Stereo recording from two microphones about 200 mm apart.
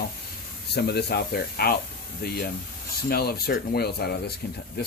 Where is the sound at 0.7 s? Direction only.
55° left (ahead or behind).